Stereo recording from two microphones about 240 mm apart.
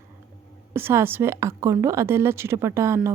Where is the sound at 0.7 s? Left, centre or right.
Centre.